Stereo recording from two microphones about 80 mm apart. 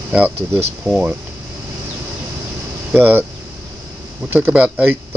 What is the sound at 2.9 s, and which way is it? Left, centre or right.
Speech, right.